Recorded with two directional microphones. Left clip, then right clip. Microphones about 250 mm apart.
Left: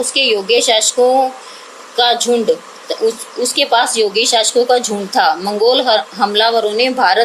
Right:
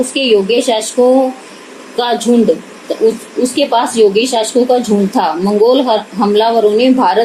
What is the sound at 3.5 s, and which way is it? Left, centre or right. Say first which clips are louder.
A woman's voice: even; left.